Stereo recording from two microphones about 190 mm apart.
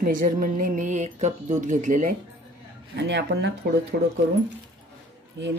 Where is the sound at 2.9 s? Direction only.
65° right (ahead or behind).